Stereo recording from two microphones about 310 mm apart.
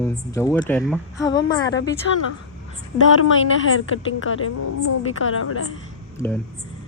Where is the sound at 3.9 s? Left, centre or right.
Left.